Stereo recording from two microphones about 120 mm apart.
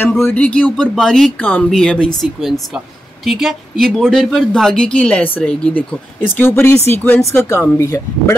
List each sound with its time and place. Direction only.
0.3 s speech: 10° left (ahead or behind)
3.3 s speech: centre (ahead or behind); by 8.4 s 25° left (ahead or behind)